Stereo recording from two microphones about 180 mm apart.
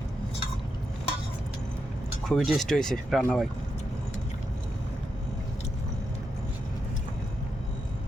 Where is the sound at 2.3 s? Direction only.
Centre (ahead or behind).